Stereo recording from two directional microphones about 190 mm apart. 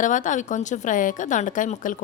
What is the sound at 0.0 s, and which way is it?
A woman's voice, 40° left (ahead or behind).